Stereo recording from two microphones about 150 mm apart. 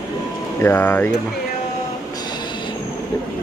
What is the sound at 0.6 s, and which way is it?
Speech, 15° left (ahead or behind).